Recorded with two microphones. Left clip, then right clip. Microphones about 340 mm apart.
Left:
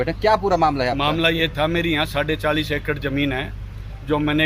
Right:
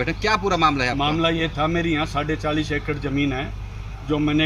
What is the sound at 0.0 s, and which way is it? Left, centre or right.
Speech, left.